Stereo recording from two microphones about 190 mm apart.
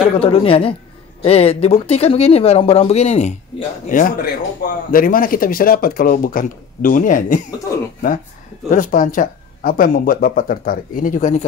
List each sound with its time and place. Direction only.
0.1 s a woman's voice: 30° left (ahead or behind)
8.6 s speech: 40° left (ahead or behind)